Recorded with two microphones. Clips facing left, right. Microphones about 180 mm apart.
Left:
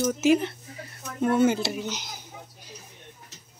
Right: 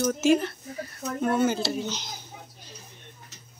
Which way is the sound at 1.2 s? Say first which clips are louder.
Left 3 dB; 25° left (ahead or behind).